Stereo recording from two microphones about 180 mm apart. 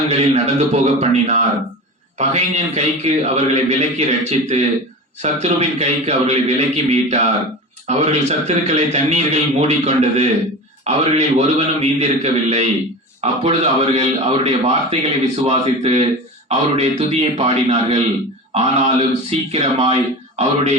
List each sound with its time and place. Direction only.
0.1 s a man's voice: 35° right (ahead or behind)